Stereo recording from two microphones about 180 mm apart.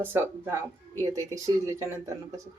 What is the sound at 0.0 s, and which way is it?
Speech, 10° right (ahead or behind).